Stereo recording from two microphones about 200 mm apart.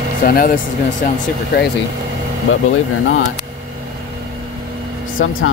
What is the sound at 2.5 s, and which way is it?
Speech, 80° left.